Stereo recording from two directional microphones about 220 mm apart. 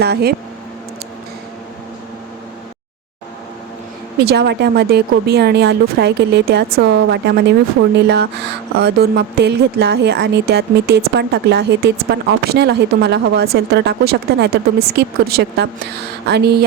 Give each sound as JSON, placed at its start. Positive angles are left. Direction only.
{"t": 0.0, "sound": "a woman's voice", "side_deg": -45}
{"t": 4.2, "sound": "a woman's voice", "side_deg": -50}